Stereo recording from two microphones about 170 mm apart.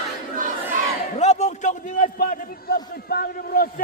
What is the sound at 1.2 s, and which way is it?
A man's voice, 40° left (ahead or behind).